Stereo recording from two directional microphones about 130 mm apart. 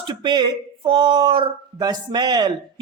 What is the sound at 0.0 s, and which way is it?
Speech, 40° right (ahead or behind).